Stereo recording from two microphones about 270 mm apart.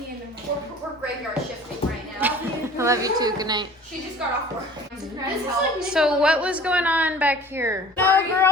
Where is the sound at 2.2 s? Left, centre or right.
Centre.